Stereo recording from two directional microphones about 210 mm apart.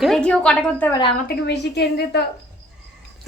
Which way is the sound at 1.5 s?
50° left (ahead or behind).